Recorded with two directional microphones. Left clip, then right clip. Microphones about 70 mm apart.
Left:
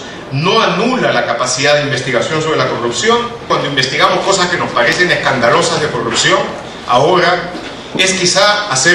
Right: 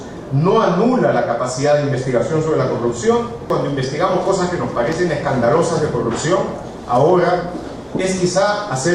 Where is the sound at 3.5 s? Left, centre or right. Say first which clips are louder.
Left 7 dB; left.